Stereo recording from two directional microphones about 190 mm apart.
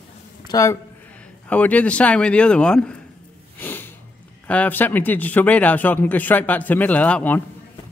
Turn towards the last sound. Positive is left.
turn(degrees=10)  # may be behind; listen again after turning